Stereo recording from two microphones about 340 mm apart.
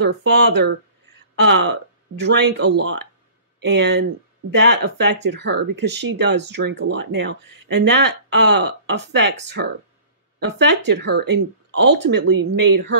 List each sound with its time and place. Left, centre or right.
0.0 s speech: right
10.8 s speech: right